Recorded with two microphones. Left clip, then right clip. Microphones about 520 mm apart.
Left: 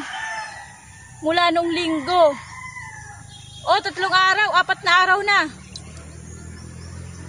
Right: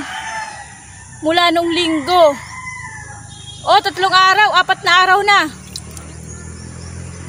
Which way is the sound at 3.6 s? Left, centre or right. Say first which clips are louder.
Right 7 dB; left.